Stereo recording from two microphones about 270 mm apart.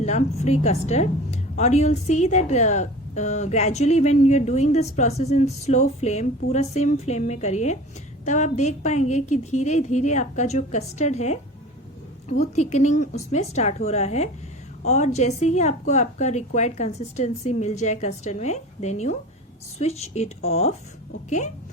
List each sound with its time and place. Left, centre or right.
0.0 s a woman's voice: left